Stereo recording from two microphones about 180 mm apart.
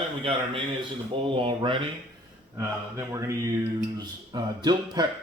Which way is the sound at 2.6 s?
15° right (ahead or behind).